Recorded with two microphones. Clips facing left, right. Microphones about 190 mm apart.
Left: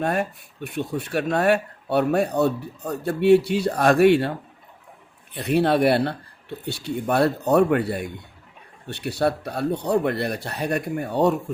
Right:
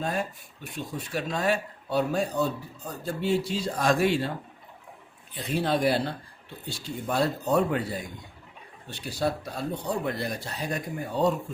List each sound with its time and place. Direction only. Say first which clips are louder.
0.0 s speech: left 6 dB; 65° left (ahead or behind)
5.3 s speech: left 7 dB; 65° left (ahead or behind)